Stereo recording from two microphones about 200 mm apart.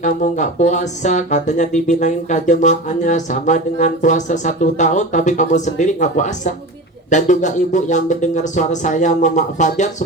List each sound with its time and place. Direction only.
0.0 s speech: 40° left (ahead or behind)